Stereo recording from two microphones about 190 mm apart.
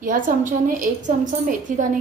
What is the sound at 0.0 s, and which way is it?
A woman's voice, 45° right (ahead or behind).